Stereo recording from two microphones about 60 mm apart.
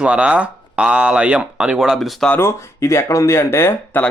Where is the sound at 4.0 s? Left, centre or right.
Left.